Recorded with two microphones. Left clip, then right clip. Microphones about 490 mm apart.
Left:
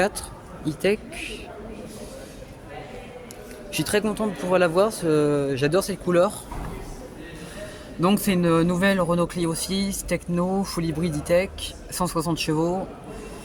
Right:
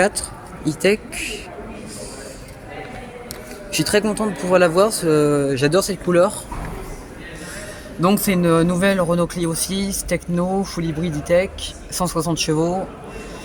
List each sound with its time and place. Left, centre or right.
0.6 s speech: left
3.7 s speech: left
8.0 s speech: left